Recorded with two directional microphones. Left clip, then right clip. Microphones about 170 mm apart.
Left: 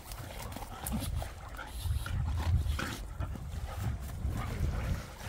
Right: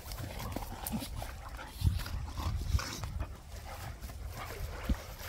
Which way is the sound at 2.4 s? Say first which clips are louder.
Left 2 dB; 20° left (ahead or behind).